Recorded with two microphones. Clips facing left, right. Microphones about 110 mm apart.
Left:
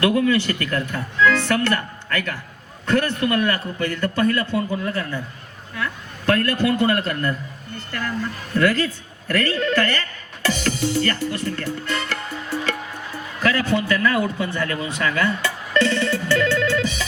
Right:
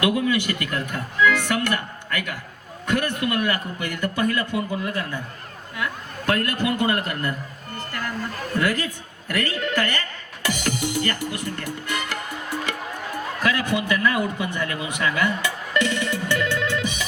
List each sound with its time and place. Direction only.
0.0 s a man's voice: 15° right (ahead or behind)
8.6 s a man's voice: 15° right (ahead or behind)
10.4 s music: 15° right (ahead or behind)
13.4 s a man's voice: 15° right (ahead or behind)